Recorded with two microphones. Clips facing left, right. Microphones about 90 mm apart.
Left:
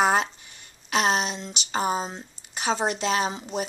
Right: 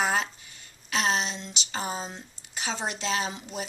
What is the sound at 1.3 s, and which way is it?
Speech, 15° left (ahead or behind).